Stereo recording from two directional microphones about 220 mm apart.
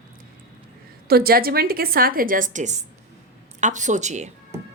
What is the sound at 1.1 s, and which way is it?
Speech, 45° right (ahead or behind).